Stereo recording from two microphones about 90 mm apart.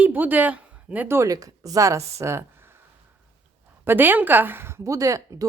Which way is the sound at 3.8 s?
25° right (ahead or behind).